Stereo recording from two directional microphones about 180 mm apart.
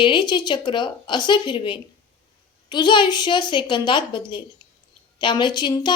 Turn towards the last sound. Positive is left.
turn(degrees=25)  # may be behind; listen again after turning